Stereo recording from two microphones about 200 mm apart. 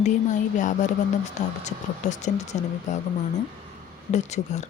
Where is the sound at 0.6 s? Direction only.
40° left (ahead or behind).